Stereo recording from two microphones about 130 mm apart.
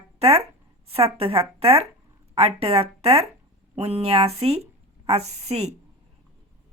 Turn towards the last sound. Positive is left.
turn(degrees=-55)  # may be behind; listen again after turning